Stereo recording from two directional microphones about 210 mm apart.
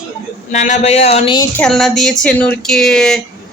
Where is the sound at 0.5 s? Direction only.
35° left (ahead or behind).